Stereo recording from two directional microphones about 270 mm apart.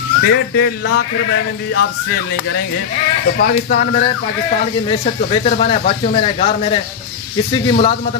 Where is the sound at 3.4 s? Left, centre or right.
Left.